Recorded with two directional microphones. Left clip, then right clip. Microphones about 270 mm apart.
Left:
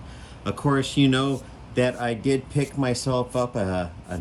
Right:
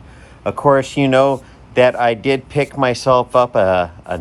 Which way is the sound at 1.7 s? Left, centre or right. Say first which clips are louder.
Right 12 dB; right.